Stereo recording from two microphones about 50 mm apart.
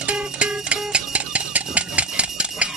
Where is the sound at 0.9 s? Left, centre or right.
Right.